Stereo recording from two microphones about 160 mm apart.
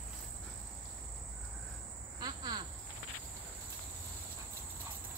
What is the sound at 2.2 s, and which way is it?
Cricket, 25° right (ahead or behind).